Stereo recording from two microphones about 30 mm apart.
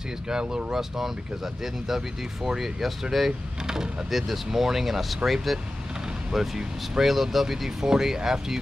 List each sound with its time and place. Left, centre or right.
0.3 s speech: right
0.7 s speech: centre
3.6 s speech: right
4.1 s speech: centre
7.8 s speech: centre